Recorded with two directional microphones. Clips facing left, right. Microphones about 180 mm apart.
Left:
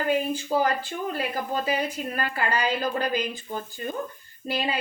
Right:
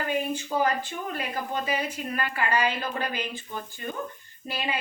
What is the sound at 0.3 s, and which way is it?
A woman's voice, 35° left (ahead or behind).